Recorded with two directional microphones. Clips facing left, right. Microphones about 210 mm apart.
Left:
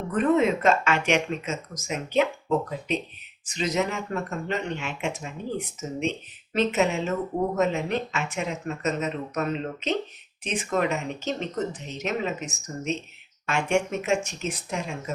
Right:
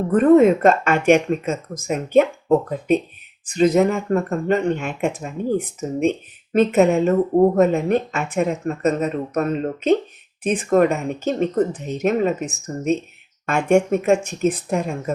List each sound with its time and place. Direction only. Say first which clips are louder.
0.1 s speech: right 9 dB; 50° right (ahead or behind)